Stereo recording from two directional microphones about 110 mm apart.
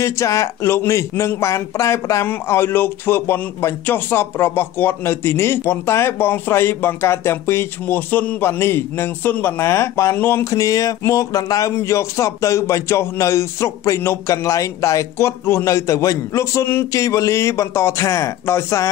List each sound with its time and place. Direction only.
0.0 s speech: 30° left (ahead or behind)